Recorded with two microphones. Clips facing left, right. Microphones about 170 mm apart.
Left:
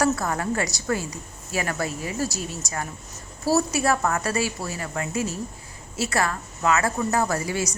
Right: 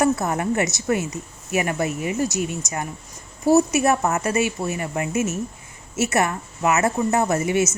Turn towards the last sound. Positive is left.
turn(degrees=-20)  # may be behind; listen again after turning